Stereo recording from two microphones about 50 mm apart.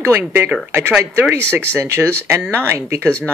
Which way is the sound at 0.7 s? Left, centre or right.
Right.